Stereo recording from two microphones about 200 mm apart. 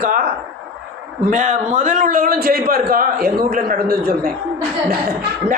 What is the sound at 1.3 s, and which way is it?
A man's voice, 40° right (ahead or behind).